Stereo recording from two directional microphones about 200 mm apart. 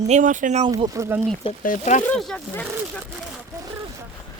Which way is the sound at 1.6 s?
40° left (ahead or behind).